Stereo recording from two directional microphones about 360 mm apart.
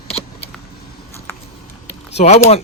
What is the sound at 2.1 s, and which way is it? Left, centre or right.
Speech, centre.